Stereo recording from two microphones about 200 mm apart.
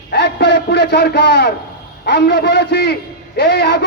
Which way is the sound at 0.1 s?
55° left (ahead or behind).